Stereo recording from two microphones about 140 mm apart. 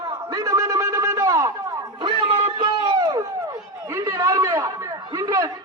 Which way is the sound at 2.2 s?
35° right (ahead or behind).